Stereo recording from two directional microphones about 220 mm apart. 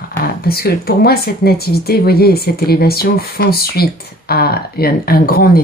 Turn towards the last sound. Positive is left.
turn(degrees=45)  # may be behind; listen again after turning